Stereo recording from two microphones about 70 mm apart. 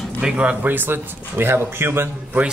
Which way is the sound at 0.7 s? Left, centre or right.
Right.